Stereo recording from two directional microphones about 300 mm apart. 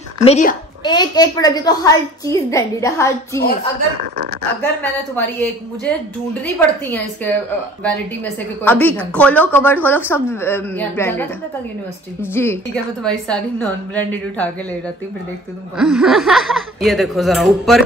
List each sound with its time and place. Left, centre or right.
0.2 s a woman's voice: left
6.4 s a woman's voice: centre
15.8 s a woman's voice: centre